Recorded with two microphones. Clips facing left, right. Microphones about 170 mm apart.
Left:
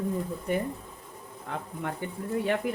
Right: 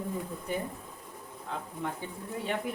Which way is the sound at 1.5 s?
65° left (ahead or behind).